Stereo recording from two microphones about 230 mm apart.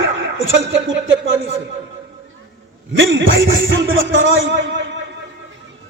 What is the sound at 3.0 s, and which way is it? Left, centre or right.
A man's voice, right.